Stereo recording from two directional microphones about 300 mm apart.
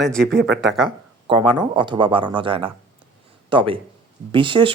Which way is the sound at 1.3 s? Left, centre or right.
Centre.